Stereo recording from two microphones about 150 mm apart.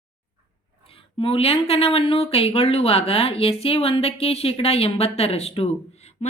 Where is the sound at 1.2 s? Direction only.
40° left (ahead or behind).